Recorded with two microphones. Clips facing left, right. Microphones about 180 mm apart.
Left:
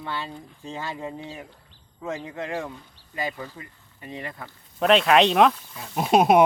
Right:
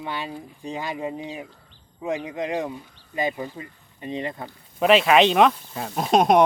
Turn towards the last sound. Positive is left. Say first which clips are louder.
# even
turn(degrees=5)  # may be behind; listen again after turning